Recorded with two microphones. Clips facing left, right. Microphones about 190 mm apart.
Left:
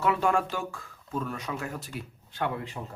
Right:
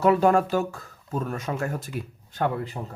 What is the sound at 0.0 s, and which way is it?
Speech, 40° right (ahead or behind).